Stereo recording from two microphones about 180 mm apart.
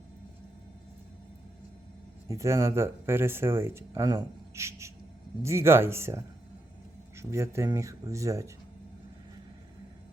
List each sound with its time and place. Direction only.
2.2 s speech: 15° right (ahead or behind)
7.2 s speech: 15° right (ahead or behind)